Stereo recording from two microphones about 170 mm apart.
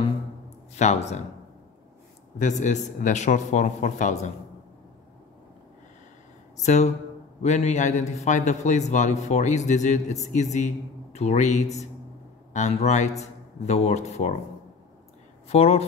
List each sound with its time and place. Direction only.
0.7 s a man's voice: 40° left (ahead or behind)
2.3 s a man's voice: 45° left (ahead or behind)
6.6 s a man's voice: 45° left (ahead or behind)
15.4 s speech: 40° left (ahead or behind)